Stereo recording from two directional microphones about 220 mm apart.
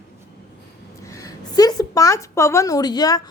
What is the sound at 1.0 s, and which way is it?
A woman's voice, 15° left (ahead or behind).